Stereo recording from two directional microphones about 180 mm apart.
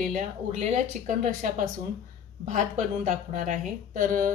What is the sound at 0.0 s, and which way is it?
A woman's voice, 40° right (ahead or behind).